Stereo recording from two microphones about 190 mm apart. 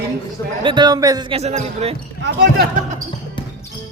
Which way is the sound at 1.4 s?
35° right (ahead or behind).